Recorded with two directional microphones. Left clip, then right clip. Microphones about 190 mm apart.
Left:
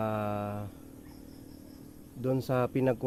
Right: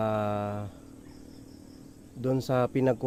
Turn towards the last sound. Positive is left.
turn(degrees=-30)  # may be behind; listen again after turning